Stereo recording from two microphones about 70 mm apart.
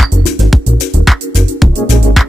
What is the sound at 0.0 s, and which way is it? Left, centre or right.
Music, centre.